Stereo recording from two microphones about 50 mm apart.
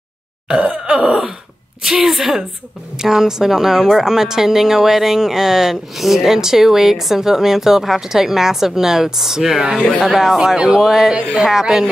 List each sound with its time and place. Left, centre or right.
0.5 s wail: centre
1.8 s speech: centre